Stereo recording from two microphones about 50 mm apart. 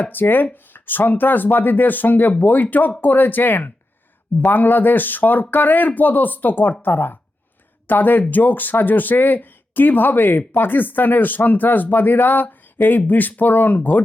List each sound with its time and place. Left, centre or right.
0.0 s speech: left